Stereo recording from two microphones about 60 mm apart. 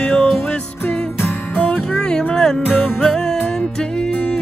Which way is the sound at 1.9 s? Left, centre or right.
Centre.